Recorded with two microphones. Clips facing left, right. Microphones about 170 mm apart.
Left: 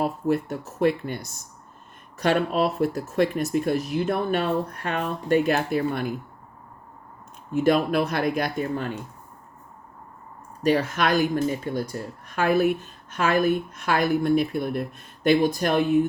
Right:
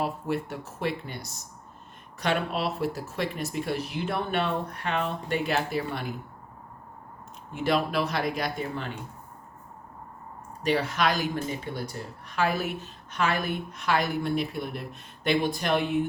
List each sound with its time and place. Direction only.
0.0 s speech: 45° left (ahead or behind)
7.5 s speech: 50° left (ahead or behind)
10.6 s speech: 45° left (ahead or behind)